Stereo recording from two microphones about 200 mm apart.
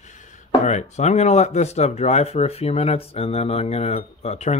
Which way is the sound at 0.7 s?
35° left (ahead or behind).